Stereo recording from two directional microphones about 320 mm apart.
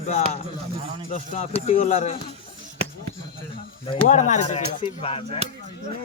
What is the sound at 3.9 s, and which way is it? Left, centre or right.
Speech, left.